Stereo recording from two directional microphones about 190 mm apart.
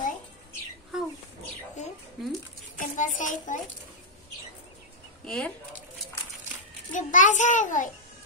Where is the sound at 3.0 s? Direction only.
45° left (ahead or behind).